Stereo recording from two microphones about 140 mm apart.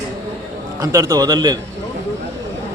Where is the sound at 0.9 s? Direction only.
20° right (ahead or behind).